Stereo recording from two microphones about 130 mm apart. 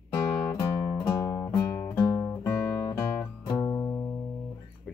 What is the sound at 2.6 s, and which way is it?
Guitar, 25° left (ahead or behind).